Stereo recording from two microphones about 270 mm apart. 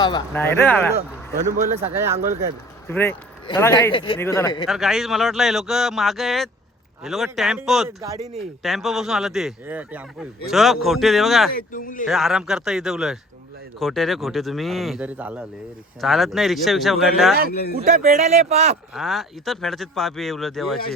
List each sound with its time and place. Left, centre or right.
0.0 s speech: centre
0.9 s speech: right
1.9 s speech: centre
2.8 s speech: centre
4.6 s speech: centre
11.7 s speech: left
12.0 s speech: centre
17.5 s speech: left
17.7 s speech: right
18.9 s speech: centre